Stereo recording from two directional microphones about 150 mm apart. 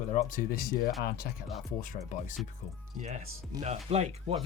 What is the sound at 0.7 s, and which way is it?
Speech, 80° left.